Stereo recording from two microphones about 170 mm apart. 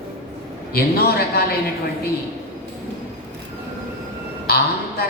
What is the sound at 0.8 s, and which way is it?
Speech, 65° left (ahead or behind).